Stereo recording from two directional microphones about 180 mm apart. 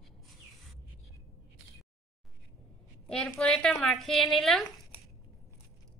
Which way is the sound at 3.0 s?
5° left (ahead or behind).